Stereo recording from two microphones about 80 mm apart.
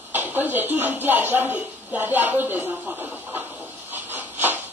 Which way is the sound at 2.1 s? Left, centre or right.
Right.